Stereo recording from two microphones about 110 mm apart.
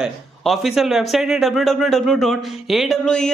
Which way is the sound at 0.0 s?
5° right (ahead or behind).